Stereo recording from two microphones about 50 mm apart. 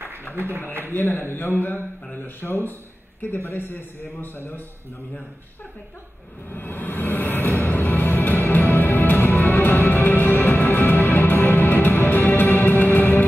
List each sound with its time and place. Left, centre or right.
0.4 s a man's voice: right
1.2 s speech: left
6.5 s vehicle: left
7.6 s music: left